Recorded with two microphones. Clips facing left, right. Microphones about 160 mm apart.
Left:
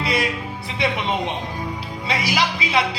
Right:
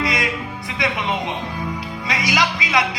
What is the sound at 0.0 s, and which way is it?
Music, 30° left (ahead or behind).